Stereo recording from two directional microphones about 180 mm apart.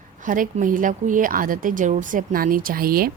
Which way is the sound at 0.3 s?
50° right (ahead or behind).